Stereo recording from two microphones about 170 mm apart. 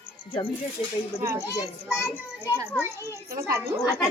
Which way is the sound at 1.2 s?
15° right (ahead or behind).